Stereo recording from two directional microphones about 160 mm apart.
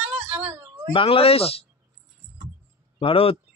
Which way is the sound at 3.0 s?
35° left (ahead or behind).